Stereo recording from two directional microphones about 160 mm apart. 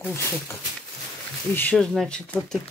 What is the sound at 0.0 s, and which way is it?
Speech, 15° left (ahead or behind).